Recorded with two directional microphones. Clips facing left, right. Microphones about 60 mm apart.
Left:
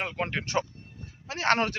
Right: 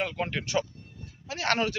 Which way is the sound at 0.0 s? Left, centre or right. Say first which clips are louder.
Even; left.